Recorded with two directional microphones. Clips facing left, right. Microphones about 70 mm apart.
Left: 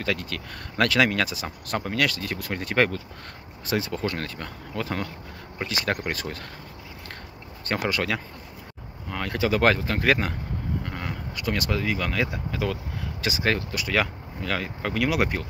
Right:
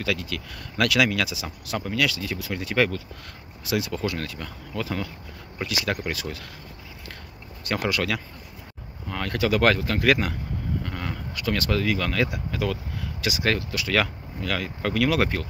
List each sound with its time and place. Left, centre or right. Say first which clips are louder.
0.0 s speech: even; left
7.9 s speech: even; left
10.8 s speech: right 1 dB; left